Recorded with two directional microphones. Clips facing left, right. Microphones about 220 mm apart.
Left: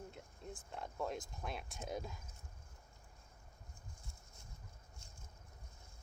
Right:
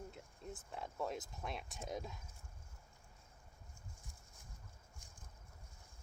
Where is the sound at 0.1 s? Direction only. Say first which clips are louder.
Even; centre (ahead or behind).